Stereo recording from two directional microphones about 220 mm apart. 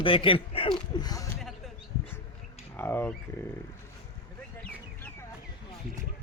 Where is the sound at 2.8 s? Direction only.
10° left (ahead or behind).